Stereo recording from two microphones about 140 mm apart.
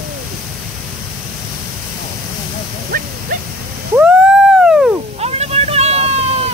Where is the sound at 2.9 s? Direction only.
75° right (ahead or behind).